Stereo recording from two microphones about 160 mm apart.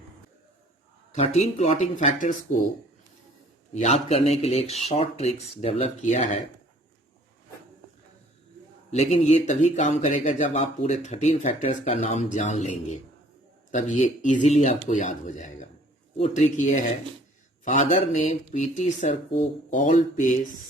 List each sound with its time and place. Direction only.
1.1 s speech: 45° left (ahead or behind)
3.8 s speech: 40° left (ahead or behind)
8.9 s speech: 40° left (ahead or behind)